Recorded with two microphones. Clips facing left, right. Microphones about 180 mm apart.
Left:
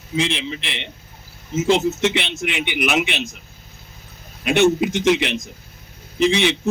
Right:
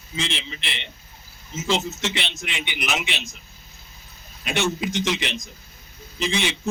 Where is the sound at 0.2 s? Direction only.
60° left (ahead or behind).